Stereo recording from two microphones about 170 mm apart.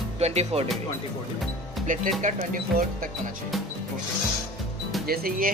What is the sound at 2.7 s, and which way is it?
Speech, 55° right (ahead or behind).